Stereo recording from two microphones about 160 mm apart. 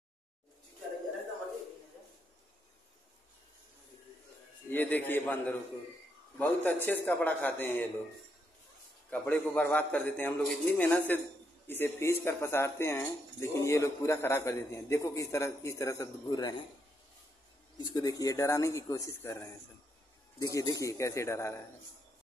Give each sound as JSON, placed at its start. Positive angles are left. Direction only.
{"t": 4.6, "sound": "speech", "side_deg": 10}
{"t": 9.1, "sound": "speech", "side_deg": 10}
{"t": 17.7, "sound": "speech", "side_deg": 25}